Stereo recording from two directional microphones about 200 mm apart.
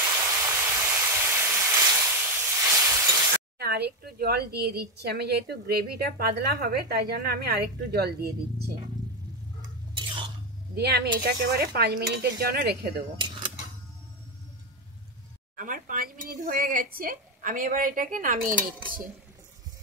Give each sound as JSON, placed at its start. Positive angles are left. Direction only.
{"t": 0.0, "sound": "a sound", "side_deg": -15}
{"t": 3.5, "sound": "speech", "side_deg": -55}
{"t": 9.9, "sound": "a sound", "side_deg": -25}
{"t": 10.7, "sound": "speech", "side_deg": -55}
{"t": 13.2, "sound": "cutlery", "side_deg": -25}
{"t": 15.5, "sound": "speech", "side_deg": -45}